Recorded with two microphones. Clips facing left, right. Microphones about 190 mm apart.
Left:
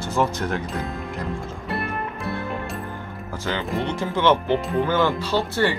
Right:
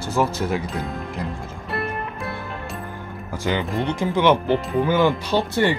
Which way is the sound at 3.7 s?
15° right (ahead or behind).